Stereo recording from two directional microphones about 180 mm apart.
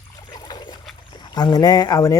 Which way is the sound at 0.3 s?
25° left (ahead or behind).